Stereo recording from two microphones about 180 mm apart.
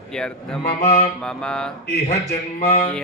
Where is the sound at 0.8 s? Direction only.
35° left (ahead or behind).